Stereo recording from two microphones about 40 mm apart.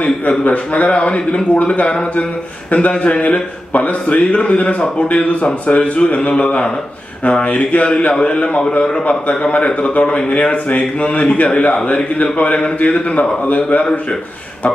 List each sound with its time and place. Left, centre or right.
0.3 s a man's voice: left
7.4 s a man's voice: left
9.0 s a man's voice: left